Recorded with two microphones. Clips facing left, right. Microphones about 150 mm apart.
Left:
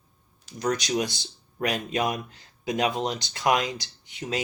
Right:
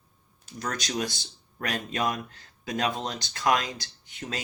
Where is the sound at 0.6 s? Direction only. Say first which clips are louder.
Left 5 dB; 15° left (ahead or behind).